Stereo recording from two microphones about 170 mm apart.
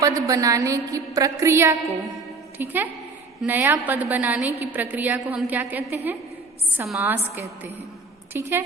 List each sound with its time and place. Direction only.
0.0 s a woman's voice: 20° right (ahead or behind)
6.9 s a woman's voice: 15° right (ahead or behind)